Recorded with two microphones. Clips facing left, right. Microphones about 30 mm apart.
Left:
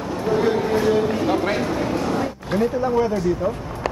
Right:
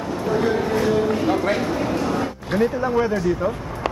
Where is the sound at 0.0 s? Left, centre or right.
Centre.